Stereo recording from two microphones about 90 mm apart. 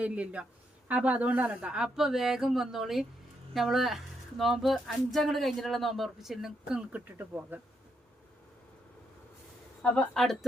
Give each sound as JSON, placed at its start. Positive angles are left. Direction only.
{"t": 0.0, "sound": "speech", "side_deg": -15}
{"t": 7.2, "sound": "speech", "side_deg": -20}
{"t": 9.8, "sound": "speech", "side_deg": 10}